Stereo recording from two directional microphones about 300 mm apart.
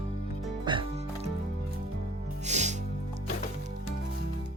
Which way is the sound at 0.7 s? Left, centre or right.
Centre.